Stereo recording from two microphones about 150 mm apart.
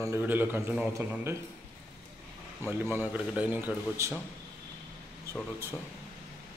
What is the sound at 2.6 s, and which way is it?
A man's voice, 15° right (ahead or behind).